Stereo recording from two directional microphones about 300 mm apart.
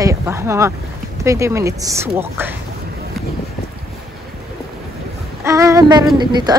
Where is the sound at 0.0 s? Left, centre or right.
Centre.